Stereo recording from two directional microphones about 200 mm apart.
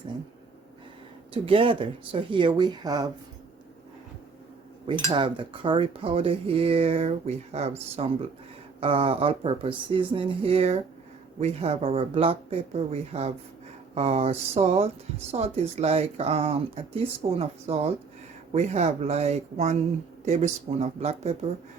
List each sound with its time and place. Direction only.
1.3 s speech: 25° right (ahead or behind)
4.9 s speech: 25° right (ahead or behind)